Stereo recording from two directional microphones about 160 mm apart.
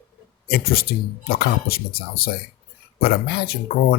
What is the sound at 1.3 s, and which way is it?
Speech, 70° left (ahead or behind).